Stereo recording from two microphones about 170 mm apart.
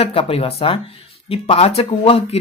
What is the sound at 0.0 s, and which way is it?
Speech, 35° left (ahead or behind).